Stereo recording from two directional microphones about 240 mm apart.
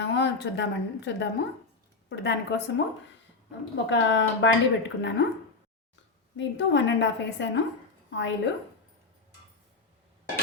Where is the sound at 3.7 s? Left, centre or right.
Left.